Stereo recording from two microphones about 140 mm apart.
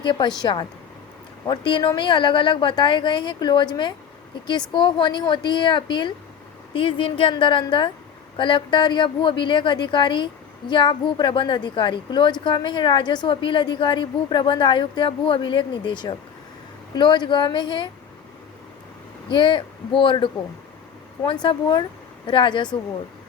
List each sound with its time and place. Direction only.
0.0 s a woman's voice: 35° left (ahead or behind)
19.3 s a woman's voice: 35° left (ahead or behind)